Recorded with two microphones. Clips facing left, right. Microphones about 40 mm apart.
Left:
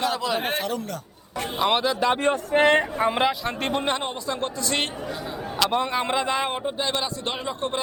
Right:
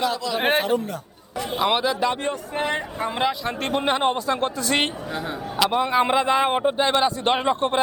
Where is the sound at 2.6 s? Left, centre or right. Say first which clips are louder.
Left 8 dB; left.